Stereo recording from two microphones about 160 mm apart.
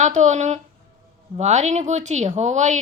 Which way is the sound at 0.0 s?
50° right (ahead or behind).